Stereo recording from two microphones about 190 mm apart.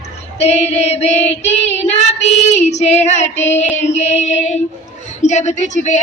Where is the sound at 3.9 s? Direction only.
35° left (ahead or behind).